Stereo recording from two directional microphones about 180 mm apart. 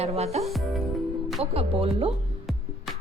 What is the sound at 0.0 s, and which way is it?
A woman's voice, 35° right (ahead or behind).